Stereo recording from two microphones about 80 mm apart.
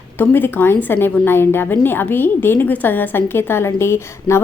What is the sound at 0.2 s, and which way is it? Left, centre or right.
A woman's voice, left.